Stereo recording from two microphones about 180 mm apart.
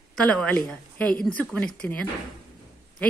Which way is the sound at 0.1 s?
5° left (ahead or behind).